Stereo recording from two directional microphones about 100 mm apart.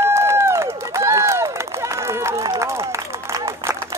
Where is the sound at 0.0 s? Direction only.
25° right (ahead or behind).